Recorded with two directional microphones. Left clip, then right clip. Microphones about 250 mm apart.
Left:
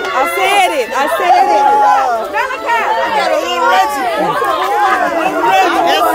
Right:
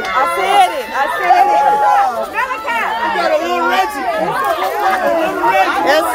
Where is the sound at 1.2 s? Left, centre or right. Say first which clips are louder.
Left 1 dB; left.